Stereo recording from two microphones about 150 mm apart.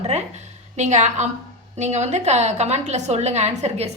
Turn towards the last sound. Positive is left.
turn(degrees=-50)  # may be behind; listen again after turning